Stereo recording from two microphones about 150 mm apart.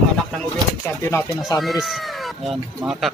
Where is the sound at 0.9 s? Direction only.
15° left (ahead or behind).